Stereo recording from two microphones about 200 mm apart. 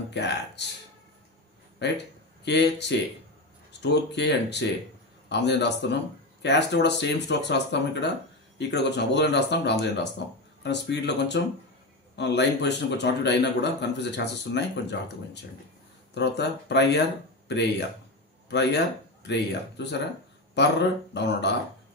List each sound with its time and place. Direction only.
0.1 s speech: 60° left (ahead or behind)
1.8 s speech: 60° left (ahead or behind)
16.2 s speech: 60° left (ahead or behind)
21.1 s speech: 60° left (ahead or behind)